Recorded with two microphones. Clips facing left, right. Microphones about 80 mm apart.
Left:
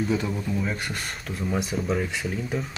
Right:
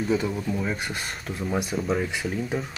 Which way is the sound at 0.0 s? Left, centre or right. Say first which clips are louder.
Right 1 dB; centre.